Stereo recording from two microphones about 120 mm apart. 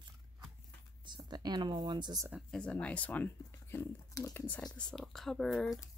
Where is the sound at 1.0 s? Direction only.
35° right (ahead or behind).